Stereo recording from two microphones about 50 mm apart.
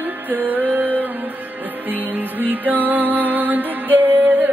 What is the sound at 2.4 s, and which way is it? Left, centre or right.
Music, right.